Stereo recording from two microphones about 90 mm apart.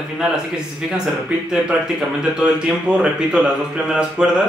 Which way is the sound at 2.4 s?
10° right (ahead or behind).